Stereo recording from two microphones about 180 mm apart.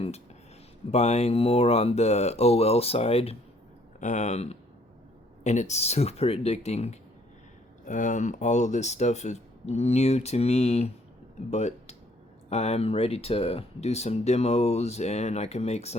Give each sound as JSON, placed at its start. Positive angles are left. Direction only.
{"t": 0.9, "sound": "speech", "side_deg": 35}